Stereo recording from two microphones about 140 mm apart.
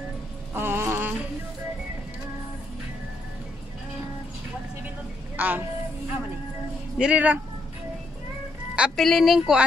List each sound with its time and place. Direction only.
0.6 s music: 15° right (ahead or behind)
5.4 s child singing: 10° right (ahead or behind)
7.0 s speech: 10° right (ahead or behind)
8.7 s a woman's voice: 5° right (ahead or behind)